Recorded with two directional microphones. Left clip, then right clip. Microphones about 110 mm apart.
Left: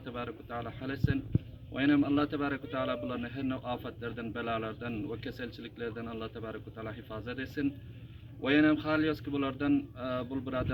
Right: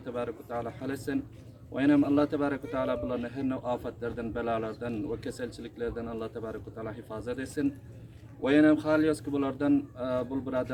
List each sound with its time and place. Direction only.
0.0 s a man's voice: 20° right (ahead or behind)